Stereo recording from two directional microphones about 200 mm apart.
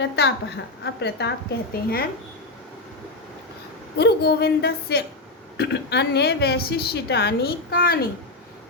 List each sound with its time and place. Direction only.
0.0 s a woman's voice: 55° left (ahead or behind)
3.9 s a woman's voice: 55° left (ahead or behind)